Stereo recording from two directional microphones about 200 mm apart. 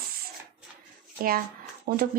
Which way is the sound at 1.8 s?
45° right (ahead or behind).